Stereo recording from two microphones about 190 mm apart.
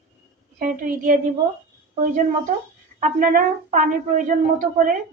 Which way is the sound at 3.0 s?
45° right (ahead or behind).